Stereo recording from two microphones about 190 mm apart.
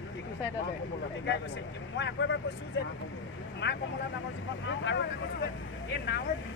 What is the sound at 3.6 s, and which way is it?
Speech, 65° left (ahead or behind).